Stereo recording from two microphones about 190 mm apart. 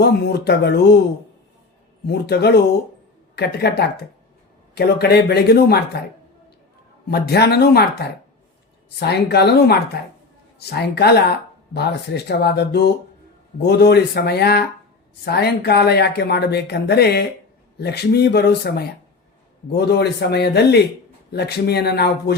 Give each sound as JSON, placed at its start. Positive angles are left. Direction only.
{"t": 0.0, "sound": "speech", "side_deg": 55}
{"t": 2.0, "sound": "speech", "side_deg": 60}
{"t": 7.1, "sound": "speech", "side_deg": 60}